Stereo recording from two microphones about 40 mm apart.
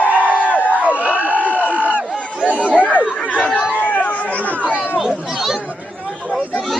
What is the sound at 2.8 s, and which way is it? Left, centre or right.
Chatter, left.